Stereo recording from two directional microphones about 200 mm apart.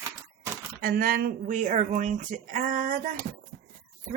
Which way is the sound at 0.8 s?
45° right (ahead or behind).